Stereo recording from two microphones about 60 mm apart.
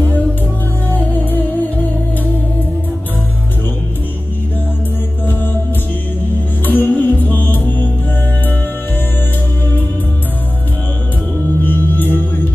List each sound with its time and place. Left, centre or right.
0.9 s music: left
6.6 s music: left
11.6 s singing bowl: left